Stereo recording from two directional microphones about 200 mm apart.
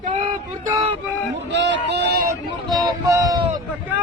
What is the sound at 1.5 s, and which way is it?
Speech, 60° right (ahead or behind).